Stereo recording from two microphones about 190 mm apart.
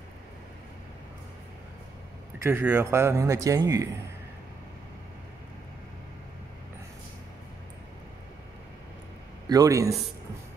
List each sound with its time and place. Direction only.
2.3 s a man's voice: 10° right (ahead or behind)
9.5 s a man's voice: 20° right (ahead or behind)